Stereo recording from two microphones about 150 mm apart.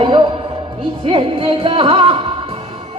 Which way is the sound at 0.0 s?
35° right (ahead or behind).